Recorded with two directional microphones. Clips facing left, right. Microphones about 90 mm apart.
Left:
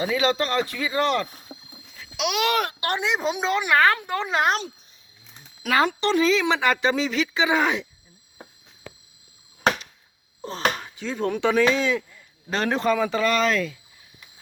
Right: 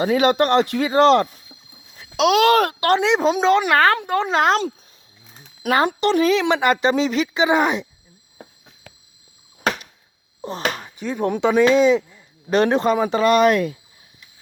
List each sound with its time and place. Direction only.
0.0 s speech: 50° right (ahead or behind); by 1.2 s 65° right (ahead or behind)
1.3 s rowboat: 50° left (ahead or behind)
2.0 s a child's voice: 35° right (ahead or behind)
2.8 s a woman's voice: 85° right
3.8 s a woman's voice: 30° right (ahead or behind)
5.6 s speech: 40° right (ahead or behind)
6.1 s speech: 55° right (ahead or behind)
6.5 s speech: 15° right (ahead or behind)
10.4 s speech: 15° right (ahead or behind)